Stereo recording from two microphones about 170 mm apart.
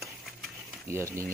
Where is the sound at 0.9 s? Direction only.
15° right (ahead or behind).